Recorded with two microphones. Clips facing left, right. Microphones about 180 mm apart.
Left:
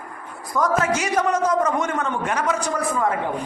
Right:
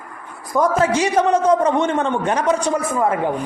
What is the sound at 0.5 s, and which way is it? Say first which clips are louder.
A man's voice: right 4 dB; 30° right (ahead or behind).